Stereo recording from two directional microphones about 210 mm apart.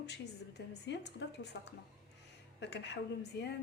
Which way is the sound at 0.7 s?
55° left (ahead or behind).